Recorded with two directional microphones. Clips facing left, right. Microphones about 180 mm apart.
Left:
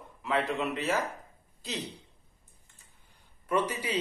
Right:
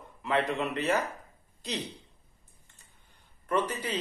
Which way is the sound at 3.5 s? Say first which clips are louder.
Even; 10° left (ahead or behind).